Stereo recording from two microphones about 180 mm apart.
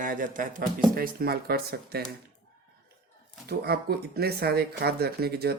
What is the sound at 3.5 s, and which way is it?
Speech, 60° right (ahead or behind).